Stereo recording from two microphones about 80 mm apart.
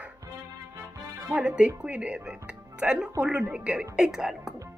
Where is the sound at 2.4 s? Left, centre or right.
Centre.